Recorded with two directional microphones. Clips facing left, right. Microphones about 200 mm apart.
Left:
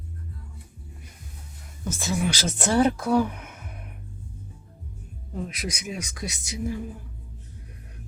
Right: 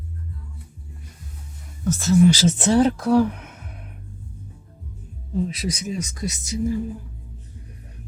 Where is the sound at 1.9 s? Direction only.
5° left (ahead or behind).